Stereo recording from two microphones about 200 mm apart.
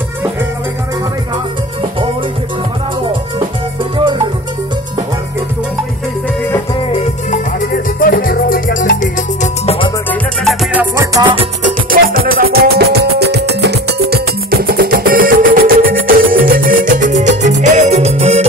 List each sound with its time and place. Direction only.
6.9 s music: 35° left (ahead or behind)
10.4 s music: 5° right (ahead or behind); by 11.4 s 20° right (ahead or behind)
11.6 s music: 45° right (ahead or behind)